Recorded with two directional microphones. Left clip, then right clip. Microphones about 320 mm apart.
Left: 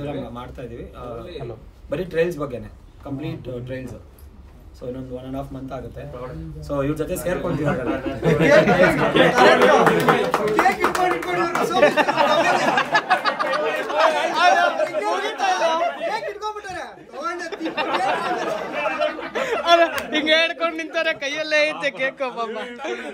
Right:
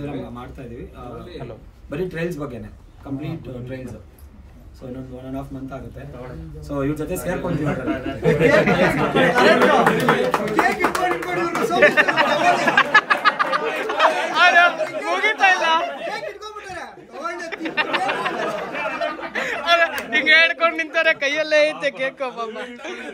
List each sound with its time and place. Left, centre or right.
1.9 s a man's voice: centre
6.7 s a man's voice: centre
12.1 s chatter: centre
17.6 s speech: centre
18.1 s chatter: centre
19.3 s chatter: left
19.9 s a man's voice: centre